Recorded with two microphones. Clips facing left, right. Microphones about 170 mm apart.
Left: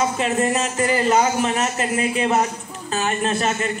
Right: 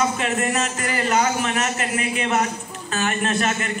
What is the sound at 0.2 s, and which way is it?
A child's voice, 30° left (ahead or behind).